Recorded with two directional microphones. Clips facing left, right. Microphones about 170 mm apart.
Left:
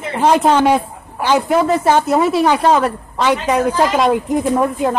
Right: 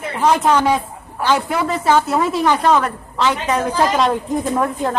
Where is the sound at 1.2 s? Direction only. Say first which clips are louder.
Left 4 dB; 15° left (ahead or behind).